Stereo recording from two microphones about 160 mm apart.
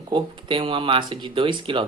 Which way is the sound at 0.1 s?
30° right (ahead or behind).